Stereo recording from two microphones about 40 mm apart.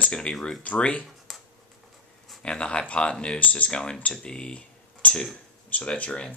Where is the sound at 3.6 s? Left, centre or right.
Left.